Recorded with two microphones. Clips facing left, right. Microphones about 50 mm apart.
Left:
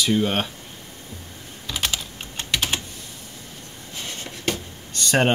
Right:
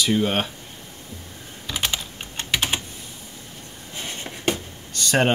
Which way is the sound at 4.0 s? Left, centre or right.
Right.